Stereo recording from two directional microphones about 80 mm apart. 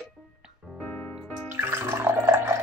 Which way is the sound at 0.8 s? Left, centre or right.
Left.